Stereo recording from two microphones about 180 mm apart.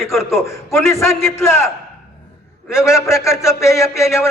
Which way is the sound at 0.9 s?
15° left (ahead or behind).